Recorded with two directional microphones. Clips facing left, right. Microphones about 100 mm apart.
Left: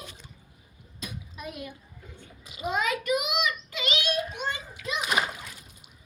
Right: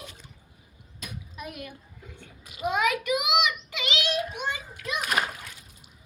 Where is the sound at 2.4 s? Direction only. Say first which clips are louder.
Right 4 dB; 55° right (ahead or behind).